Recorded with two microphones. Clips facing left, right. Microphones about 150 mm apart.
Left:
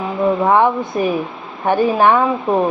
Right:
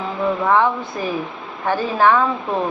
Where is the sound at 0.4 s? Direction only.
20° left (ahead or behind).